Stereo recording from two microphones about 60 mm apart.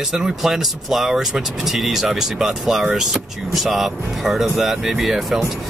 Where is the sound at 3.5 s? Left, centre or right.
Centre.